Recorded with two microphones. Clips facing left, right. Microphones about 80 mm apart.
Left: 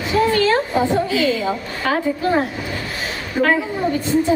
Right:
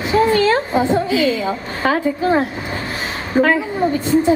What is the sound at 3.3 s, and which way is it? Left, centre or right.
Speech, right.